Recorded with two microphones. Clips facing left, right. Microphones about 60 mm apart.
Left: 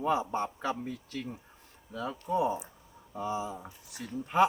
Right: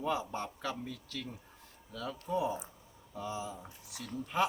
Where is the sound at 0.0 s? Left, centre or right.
Left.